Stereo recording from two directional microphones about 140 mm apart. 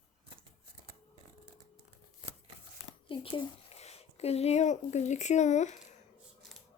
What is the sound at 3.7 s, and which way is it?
Speech, 50° left (ahead or behind).